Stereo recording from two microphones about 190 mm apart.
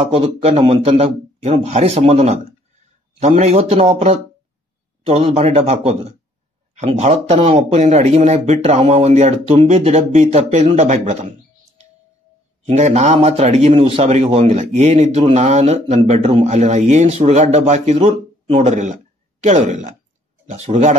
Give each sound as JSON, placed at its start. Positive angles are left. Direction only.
{"t": 0.0, "sound": "a man's voice", "side_deg": -30}
{"t": 12.6, "sound": "a man's voice", "side_deg": -35}